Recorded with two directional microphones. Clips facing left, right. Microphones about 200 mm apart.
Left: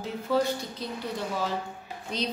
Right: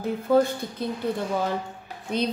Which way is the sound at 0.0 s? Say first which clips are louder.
Right 6 dB; 55° right (ahead or behind).